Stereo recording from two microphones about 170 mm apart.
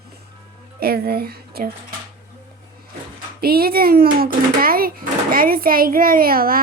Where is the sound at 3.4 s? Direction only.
65° right (ahead or behind).